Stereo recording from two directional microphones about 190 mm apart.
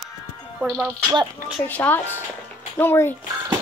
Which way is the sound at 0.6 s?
5° right (ahead or behind).